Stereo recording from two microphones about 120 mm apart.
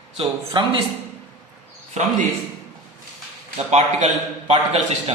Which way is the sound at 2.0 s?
70° right (ahead or behind).